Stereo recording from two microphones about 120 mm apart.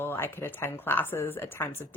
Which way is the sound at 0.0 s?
20° left (ahead or behind).